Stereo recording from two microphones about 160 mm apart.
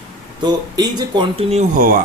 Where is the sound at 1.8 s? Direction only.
60° right (ahead or behind).